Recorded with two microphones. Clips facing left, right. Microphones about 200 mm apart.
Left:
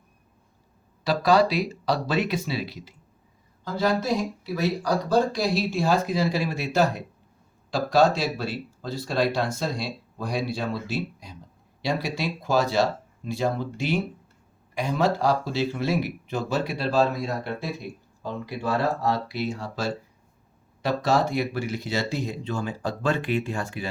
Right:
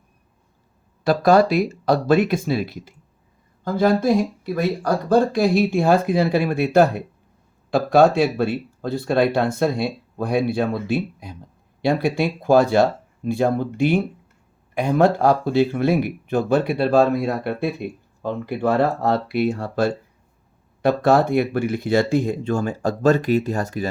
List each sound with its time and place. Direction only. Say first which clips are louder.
1.0 s speech: right 5 dB; 50° right (ahead or behind)